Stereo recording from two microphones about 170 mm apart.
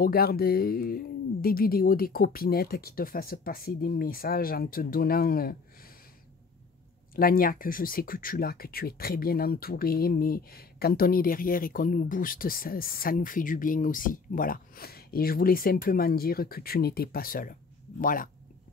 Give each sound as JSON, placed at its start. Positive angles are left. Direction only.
{"t": 0.0, "sound": "speech", "side_deg": 65}
{"t": 7.2, "sound": "speech", "side_deg": 60}